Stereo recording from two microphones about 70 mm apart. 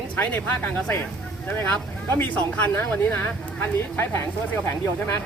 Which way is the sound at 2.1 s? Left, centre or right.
Left.